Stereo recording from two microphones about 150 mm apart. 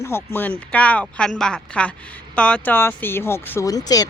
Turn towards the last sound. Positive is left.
turn(degrees=25)  # may be behind; listen again after turning